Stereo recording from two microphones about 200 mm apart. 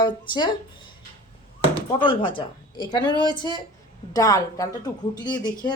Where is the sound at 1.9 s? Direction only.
25° left (ahead or behind).